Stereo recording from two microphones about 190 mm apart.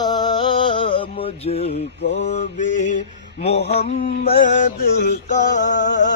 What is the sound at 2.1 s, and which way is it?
Mantra, 40° left (ahead or behind).